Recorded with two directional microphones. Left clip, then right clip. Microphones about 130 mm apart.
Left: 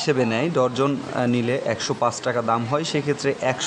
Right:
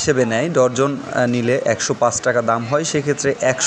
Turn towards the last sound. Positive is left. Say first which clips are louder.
# right 5 dB
turn(degrees=-15)  # may be behind; listen again after turning